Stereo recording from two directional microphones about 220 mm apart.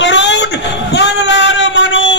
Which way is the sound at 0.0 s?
55° left (ahead or behind).